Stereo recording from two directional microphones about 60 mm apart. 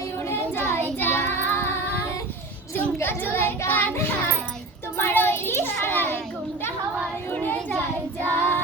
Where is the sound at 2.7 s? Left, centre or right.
Left.